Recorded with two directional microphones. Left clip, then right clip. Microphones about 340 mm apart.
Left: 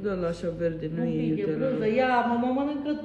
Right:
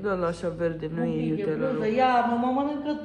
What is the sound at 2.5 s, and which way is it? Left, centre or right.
Speech, centre.